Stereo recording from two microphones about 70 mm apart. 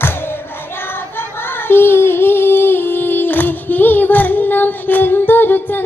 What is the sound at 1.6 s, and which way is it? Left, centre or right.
Child singing, left.